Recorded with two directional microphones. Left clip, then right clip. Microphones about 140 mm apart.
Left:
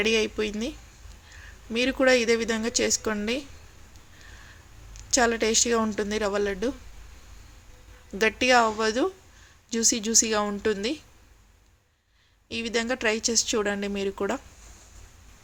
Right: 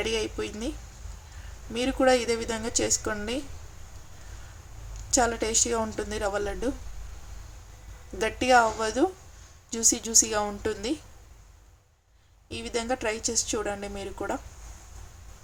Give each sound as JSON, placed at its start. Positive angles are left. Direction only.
{"t": 0.0, "sound": "a woman's voice", "side_deg": 20}
{"t": 1.7, "sound": "a woman's voice", "side_deg": 20}
{"t": 5.1, "sound": "a woman's voice", "side_deg": 20}
{"t": 8.2, "sound": "a woman's voice", "side_deg": 20}
{"t": 12.5, "sound": "a woman's voice", "side_deg": 20}